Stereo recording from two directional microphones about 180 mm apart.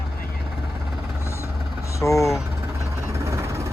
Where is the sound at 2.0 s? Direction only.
15° left (ahead or behind).